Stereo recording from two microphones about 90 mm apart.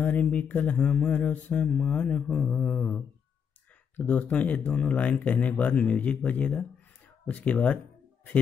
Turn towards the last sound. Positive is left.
turn(degrees=15)  # may be behind; listen again after turning